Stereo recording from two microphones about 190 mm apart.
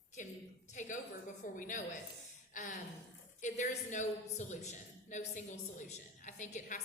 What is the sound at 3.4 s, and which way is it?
A woman's voice, 40° left (ahead or behind).